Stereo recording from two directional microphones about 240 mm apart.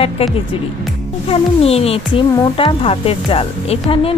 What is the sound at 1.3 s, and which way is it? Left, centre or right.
Speech, left.